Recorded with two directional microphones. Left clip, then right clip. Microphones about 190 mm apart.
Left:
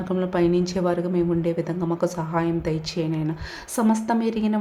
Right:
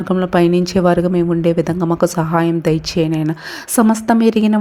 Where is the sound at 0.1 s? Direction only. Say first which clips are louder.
Right 8 dB; 35° right (ahead or behind).